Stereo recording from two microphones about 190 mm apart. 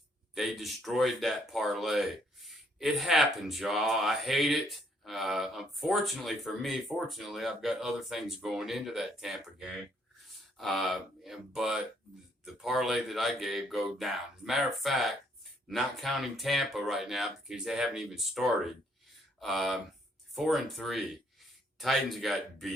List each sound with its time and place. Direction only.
0.3 s speech: centre (ahead or behind)